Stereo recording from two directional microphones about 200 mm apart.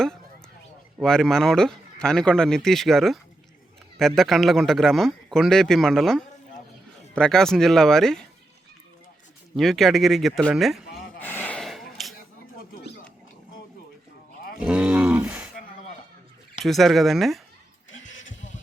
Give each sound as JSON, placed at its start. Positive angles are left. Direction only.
{"t": 0.9, "sound": "speech", "side_deg": 5}
{"t": 9.6, "sound": "speech", "side_deg": 0}
{"t": 11.2, "sound": "snort", "side_deg": 10}
{"t": 14.6, "sound": "a sound", "side_deg": -5}
{"t": 16.6, "sound": "speech", "side_deg": 0}